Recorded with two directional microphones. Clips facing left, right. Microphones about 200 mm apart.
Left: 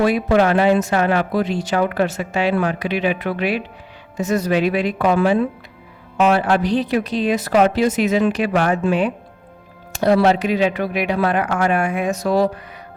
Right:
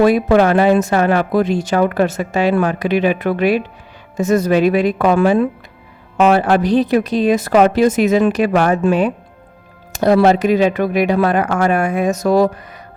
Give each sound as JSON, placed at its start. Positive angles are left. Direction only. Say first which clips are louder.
{"t": 0.0, "sound": "speech", "louder": "right 4 dB", "side_deg": -45}